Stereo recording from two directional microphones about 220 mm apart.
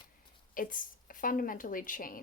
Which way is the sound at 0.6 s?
40° left (ahead or behind).